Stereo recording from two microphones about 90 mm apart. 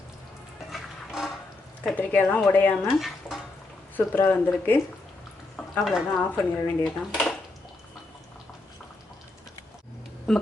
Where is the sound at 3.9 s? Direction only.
20° left (ahead or behind).